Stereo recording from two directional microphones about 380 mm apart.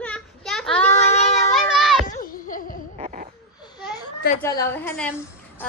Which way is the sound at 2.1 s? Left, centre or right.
Left.